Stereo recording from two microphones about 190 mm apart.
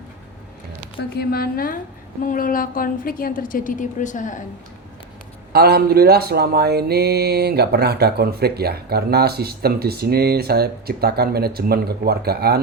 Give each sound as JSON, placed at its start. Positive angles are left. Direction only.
{"t": 0.9, "sound": "a woman's voice", "side_deg": 50}
{"t": 5.5, "sound": "mantra", "side_deg": -55}